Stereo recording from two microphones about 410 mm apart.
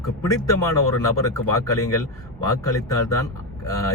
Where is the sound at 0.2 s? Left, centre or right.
Centre.